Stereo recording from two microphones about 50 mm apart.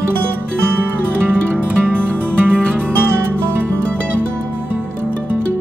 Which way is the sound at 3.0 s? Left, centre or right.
Right.